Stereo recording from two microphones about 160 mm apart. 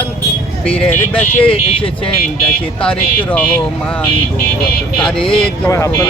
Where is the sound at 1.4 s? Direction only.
35° left (ahead or behind).